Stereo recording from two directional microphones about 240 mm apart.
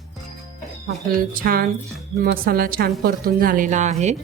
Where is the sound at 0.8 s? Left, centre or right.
Right.